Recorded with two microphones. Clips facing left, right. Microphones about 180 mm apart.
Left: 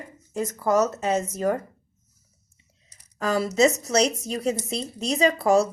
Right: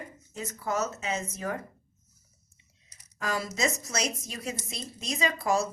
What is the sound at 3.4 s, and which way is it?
A woman's voice, 30° left (ahead or behind).